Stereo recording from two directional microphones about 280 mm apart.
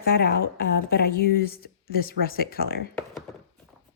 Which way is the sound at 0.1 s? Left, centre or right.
Left.